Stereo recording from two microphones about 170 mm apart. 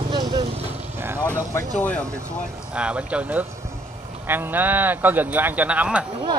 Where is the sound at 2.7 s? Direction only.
5° right (ahead or behind).